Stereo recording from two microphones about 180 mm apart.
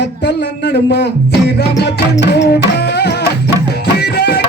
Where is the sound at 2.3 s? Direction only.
65° left (ahead or behind).